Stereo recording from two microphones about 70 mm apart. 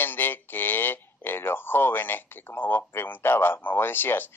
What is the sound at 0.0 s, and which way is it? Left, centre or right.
Speech, left.